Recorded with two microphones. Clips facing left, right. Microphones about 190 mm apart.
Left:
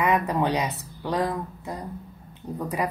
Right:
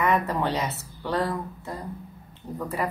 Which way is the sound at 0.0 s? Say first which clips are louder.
Left 1 dB; 15° left (ahead or behind).